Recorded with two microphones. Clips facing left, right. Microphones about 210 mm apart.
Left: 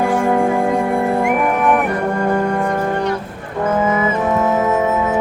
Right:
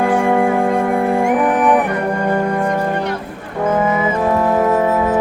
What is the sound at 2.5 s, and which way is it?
Music, 5° right (ahead or behind).